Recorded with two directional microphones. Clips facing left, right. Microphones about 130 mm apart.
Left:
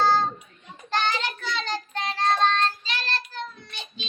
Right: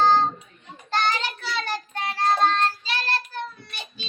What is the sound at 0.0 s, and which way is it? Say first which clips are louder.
Child singing: right 2 dB; 15° right (ahead or behind).